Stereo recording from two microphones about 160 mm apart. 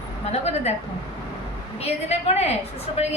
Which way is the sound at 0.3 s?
45° left (ahead or behind).